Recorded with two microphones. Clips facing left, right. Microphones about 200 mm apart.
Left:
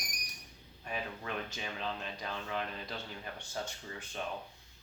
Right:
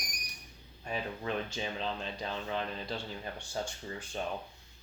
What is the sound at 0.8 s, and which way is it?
Speech, 30° right (ahead or behind).